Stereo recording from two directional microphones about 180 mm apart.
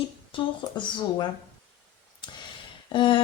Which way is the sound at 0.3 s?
25° left (ahead or behind).